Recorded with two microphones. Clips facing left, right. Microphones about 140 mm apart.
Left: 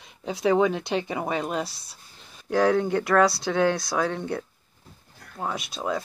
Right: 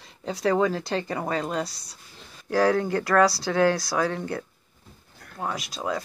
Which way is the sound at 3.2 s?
20° left (ahead or behind).